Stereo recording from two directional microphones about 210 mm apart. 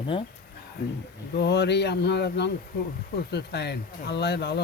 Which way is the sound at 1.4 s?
55° left (ahead or behind).